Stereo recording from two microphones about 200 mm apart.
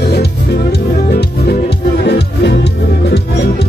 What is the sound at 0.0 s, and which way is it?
Music, 55° left (ahead or behind).